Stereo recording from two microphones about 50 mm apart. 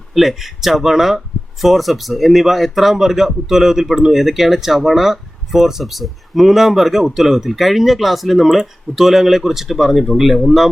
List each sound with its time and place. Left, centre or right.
0.1 s speech: centre